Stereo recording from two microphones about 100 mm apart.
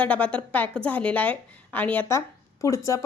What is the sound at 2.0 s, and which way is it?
Speech, 30° left (ahead or behind).